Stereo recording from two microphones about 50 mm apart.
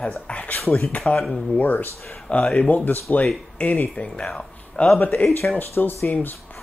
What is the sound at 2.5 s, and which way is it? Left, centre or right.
Speech, left.